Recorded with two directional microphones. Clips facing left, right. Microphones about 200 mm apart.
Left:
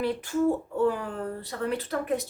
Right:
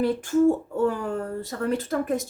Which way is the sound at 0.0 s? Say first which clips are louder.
Right 5 dB; 45° right (ahead or behind).